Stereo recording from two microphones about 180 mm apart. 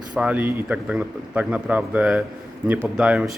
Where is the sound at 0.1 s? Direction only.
5° right (ahead or behind).